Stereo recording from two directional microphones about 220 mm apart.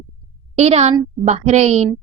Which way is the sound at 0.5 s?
30° right (ahead or behind).